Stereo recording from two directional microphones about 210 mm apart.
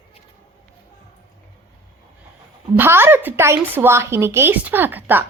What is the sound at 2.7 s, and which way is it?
A woman's voice, 10° right (ahead or behind).